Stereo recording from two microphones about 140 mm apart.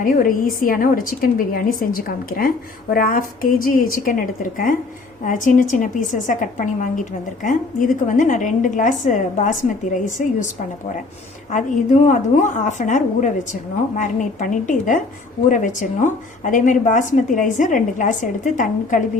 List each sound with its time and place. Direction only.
0.0 s a woman's voice: 75° left (ahead or behind)
11.5 s a woman's voice: 60° left (ahead or behind)